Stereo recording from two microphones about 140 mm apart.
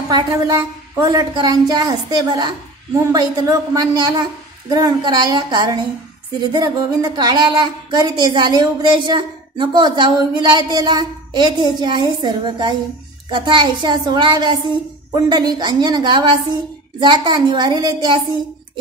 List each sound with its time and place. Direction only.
0.1 s a woman's voice: 25° right (ahead or behind)